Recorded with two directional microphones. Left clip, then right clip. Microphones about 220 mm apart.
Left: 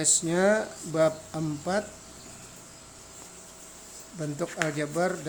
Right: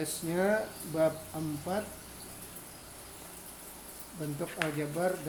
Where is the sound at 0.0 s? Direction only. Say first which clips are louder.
Left 7 dB; 30° left (ahead or behind).